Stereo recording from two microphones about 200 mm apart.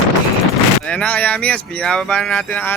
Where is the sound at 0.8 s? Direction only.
5° left (ahead or behind).